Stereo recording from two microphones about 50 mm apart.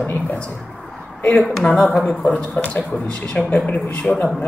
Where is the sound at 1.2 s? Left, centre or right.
Left.